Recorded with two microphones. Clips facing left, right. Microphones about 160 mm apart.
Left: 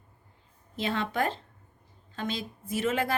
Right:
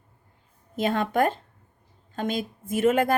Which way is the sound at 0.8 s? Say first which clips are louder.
Right 6 dB; 50° right (ahead or behind).